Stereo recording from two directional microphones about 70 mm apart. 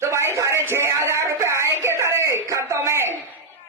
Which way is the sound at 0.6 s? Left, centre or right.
Right.